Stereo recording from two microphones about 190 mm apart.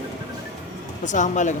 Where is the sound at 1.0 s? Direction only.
40° left (ahead or behind).